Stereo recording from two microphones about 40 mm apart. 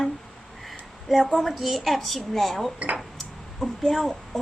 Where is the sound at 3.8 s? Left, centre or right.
Centre.